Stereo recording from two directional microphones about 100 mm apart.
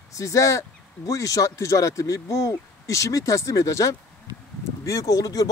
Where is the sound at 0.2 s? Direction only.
35° left (ahead or behind).